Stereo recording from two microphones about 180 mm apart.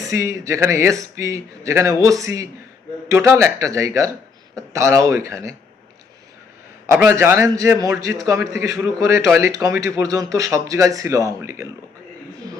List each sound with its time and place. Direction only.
0.0 s speech: 15° right (ahead or behind)
6.9 s speech: 10° right (ahead or behind)